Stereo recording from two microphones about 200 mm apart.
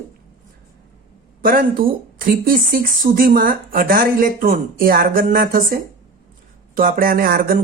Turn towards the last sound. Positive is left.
turn(degrees=-45)  # may be behind; listen again after turning